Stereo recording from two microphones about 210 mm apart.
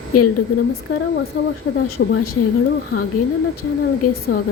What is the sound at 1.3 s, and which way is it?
Speech, 40° left (ahead or behind).